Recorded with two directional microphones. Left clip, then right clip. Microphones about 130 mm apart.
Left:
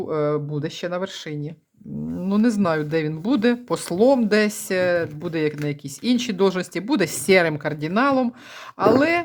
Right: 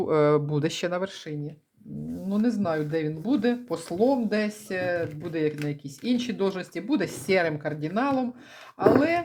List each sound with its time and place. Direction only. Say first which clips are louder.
0.0 s speech: right 1 dB; 10° right (ahead or behind)
2.3 s speech: left 6 dB; 50° left (ahead or behind)